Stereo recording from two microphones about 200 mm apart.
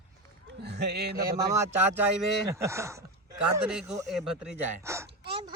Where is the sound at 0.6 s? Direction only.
55° right (ahead or behind).